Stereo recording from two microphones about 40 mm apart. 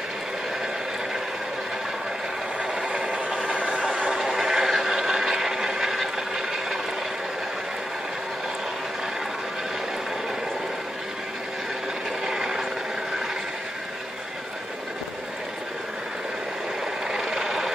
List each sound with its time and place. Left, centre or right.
2.9 s a sound: right
3.5 s vehicle: right
4.2 s a sound: centre
5.8 s vehicle: centre
12.3 s vehicle: centre
17.1 s vehicle: centre